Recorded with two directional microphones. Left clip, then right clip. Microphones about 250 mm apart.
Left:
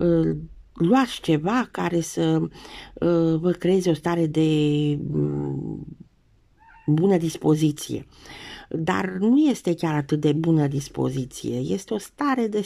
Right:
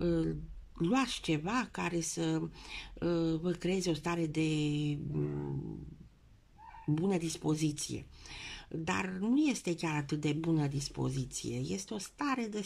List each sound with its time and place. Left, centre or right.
0.0 s speech: left
7.0 s speech: left